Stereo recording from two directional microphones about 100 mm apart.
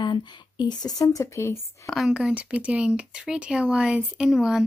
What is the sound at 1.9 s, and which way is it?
Speech, 5° right (ahead or behind).